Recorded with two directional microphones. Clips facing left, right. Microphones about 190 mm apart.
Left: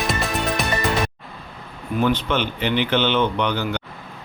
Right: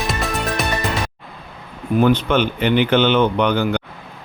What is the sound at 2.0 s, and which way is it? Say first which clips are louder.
Speech: right 5 dB; 50° right (ahead or behind).